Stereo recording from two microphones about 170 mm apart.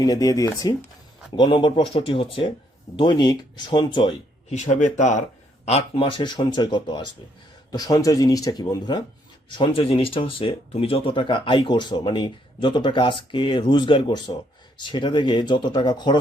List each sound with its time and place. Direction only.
0.0 s speech: 20° left (ahead or behind)
4.4 s speech: 45° left (ahead or behind); by 16.1 s 25° left (ahead or behind)